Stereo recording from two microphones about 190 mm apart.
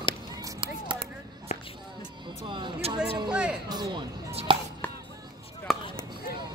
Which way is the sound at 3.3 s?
5° right (ahead or behind).